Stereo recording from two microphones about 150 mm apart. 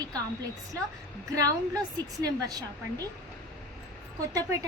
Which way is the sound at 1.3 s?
25° right (ahead or behind).